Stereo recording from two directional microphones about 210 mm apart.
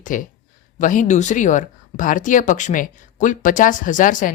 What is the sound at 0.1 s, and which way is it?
A woman's voice, 40° left (ahead or behind).